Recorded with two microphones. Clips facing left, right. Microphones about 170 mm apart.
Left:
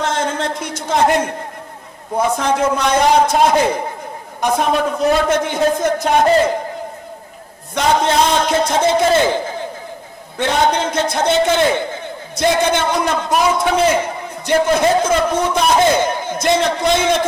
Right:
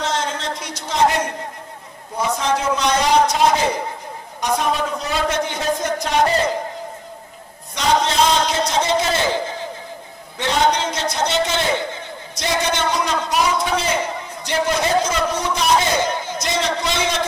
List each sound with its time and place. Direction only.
0.0 s a sound: 55° left (ahead or behind)
2.1 s a man's voice: 55° left (ahead or behind)
7.7 s a man's voice: 55° left (ahead or behind)
10.3 s a man's voice: 55° left (ahead or behind)